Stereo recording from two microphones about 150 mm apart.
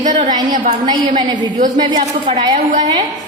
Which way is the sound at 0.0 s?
55° right (ahead or behind).